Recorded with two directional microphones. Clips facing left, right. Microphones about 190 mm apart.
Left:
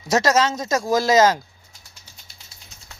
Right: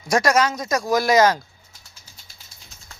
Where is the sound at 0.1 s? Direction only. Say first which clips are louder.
Even; 25° left (ahead or behind).